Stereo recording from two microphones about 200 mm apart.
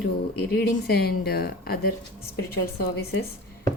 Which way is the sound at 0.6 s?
50° left (ahead or behind).